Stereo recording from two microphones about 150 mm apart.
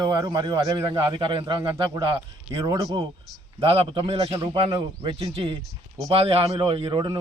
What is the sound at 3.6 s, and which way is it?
A man's voice, 40° right (ahead or behind).